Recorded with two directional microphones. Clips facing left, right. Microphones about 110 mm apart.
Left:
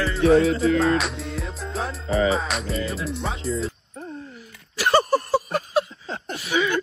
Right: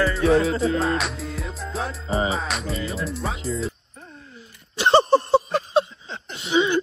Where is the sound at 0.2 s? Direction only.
30° right (ahead or behind).